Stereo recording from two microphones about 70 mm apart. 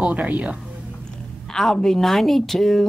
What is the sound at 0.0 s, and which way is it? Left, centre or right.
Speech, right.